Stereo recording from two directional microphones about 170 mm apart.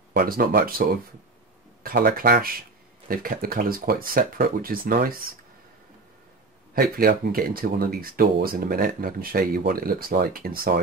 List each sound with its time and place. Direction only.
0.1 s speech: 60° right (ahead or behind)
6.7 s speech: 60° right (ahead or behind)